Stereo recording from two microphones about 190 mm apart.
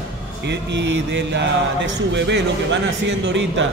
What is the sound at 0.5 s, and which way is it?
Speech, 70° right (ahead or behind).